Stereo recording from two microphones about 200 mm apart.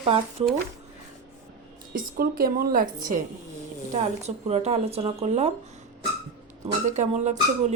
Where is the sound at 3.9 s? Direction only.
35° right (ahead or behind).